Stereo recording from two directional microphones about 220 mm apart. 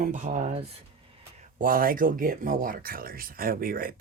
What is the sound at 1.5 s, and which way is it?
Speech, 40° right (ahead or behind).